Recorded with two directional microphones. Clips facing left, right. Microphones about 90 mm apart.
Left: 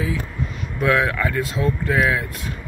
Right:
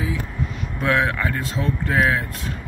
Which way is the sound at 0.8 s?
25° right (ahead or behind).